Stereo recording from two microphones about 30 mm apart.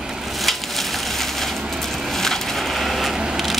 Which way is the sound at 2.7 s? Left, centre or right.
Centre.